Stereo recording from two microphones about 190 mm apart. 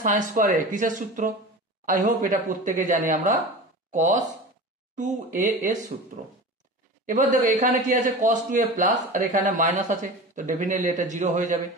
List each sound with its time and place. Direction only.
0.0 s a man's voice: 40° right (ahead or behind)